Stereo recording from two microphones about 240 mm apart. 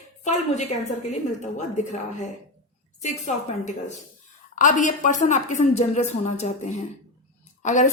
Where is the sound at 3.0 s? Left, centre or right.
Left.